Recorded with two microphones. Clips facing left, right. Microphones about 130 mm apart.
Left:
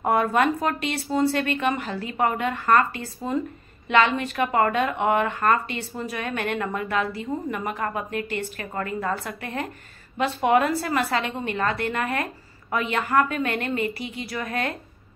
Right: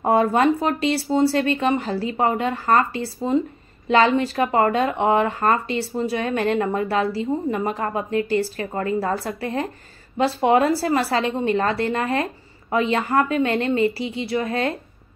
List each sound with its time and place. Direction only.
0.0 s a woman's voice: 30° right (ahead or behind)